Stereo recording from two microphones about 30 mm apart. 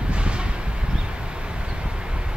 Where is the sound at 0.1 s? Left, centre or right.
Right.